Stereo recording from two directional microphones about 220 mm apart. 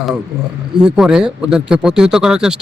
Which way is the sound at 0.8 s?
5° right (ahead or behind).